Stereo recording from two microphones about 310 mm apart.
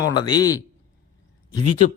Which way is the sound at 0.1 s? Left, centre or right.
Centre.